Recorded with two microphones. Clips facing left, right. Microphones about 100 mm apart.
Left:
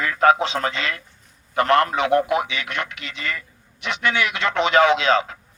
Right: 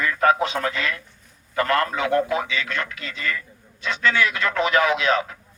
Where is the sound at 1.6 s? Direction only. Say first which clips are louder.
Left 4 dB; 20° left (ahead or behind).